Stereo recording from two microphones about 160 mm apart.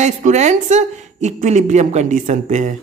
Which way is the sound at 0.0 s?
45° right (ahead or behind).